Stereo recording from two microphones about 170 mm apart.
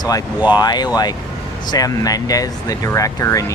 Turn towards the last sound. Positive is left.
turn(degrees=20)  # may be behind; listen again after turning